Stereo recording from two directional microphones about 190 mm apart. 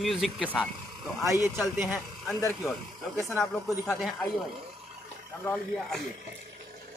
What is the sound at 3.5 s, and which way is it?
Speech, centre (ahead or behind).